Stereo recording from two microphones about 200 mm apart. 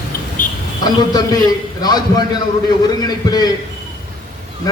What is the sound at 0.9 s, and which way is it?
A man's voice, 20° left (ahead or behind).